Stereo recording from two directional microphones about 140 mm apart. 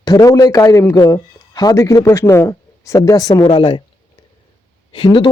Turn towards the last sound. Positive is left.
turn(degrees=35)  # may be behind; listen again after turning